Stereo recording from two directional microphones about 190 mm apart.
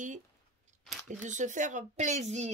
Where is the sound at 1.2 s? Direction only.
40° right (ahead or behind).